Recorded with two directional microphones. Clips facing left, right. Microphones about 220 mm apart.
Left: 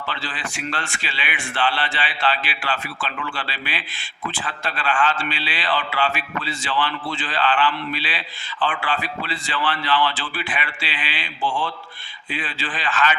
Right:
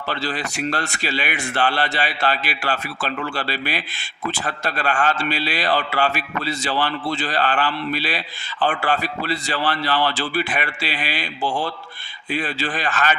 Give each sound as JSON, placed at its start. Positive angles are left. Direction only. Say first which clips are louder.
{"t": 0.1, "sound": "a man's voice", "louder": "right 9 dB", "side_deg": -40}